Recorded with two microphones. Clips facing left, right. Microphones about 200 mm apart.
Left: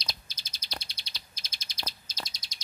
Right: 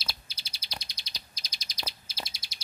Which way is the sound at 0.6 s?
15° right (ahead or behind).